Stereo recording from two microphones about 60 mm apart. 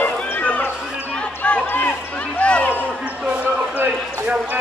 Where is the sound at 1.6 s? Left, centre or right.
Left.